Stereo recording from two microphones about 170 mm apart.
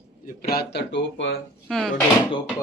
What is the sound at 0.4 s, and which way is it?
Speech, 70° left (ahead or behind).